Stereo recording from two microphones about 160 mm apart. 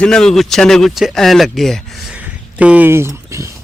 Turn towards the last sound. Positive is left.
turn(degrees=-20)  # may be behind; listen again after turning